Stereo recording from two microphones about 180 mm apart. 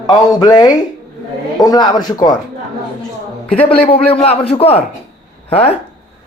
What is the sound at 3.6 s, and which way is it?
A man's voice, 30° left (ahead or behind).